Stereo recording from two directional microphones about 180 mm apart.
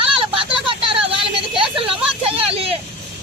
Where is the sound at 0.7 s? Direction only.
30° right (ahead or behind).